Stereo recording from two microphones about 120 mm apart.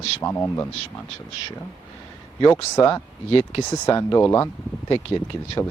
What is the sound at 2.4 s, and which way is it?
Speech, 30° left (ahead or behind).